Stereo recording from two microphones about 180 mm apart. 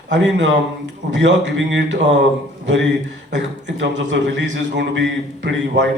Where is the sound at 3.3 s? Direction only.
85° right.